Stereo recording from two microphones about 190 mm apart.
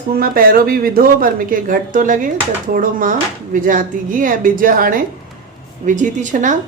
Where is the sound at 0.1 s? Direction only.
50° right (ahead or behind).